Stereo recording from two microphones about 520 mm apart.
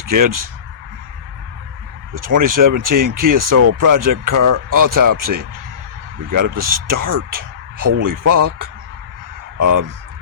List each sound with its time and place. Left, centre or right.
0.0 s speech: right
2.1 s speech: right